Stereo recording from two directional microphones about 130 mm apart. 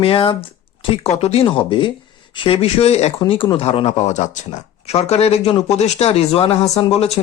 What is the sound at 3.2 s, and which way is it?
Speech, 40° left (ahead or behind).